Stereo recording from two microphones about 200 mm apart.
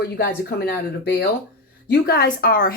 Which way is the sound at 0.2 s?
55° left (ahead or behind).